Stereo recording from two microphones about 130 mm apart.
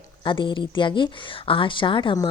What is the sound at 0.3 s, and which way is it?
Speech, 40° left (ahead or behind).